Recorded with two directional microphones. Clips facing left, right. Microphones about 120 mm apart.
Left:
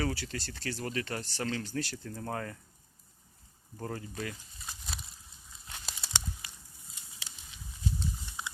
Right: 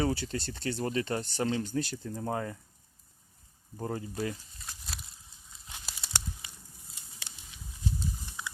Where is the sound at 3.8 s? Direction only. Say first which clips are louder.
Right 3 dB; 20° right (ahead or behind).